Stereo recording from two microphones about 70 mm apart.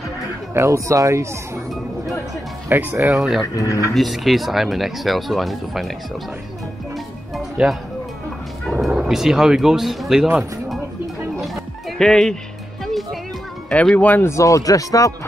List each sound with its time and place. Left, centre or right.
0.6 s speech: right
2.7 s speech: right
3.1 s speech: centre
3.5 s speech: left
3.9 s speech: centre
7.6 s speech: centre
8.8 s speech: centre
12.0 s speech: centre
12.8 s music: centre
13.7 s speech: centre
13.9 s speech: left
14.2 s speech: left